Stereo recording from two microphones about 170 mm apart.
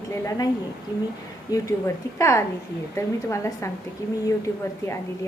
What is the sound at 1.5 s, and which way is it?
A woman's voice, 20° left (ahead or behind).